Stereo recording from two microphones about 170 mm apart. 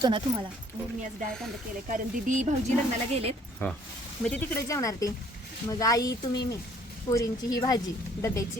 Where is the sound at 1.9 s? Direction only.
50° right (ahead or behind).